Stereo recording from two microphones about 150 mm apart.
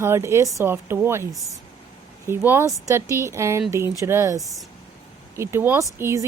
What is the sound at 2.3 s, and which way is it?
Speech, 15° right (ahead or behind).